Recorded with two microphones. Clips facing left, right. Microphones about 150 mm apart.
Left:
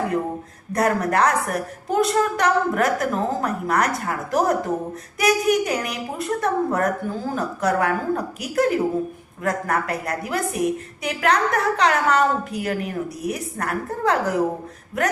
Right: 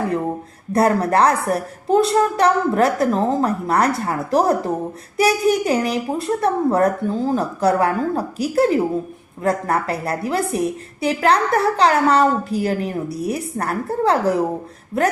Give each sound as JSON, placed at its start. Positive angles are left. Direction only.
{"t": 0.7, "sound": "a woman's voice", "side_deg": -30}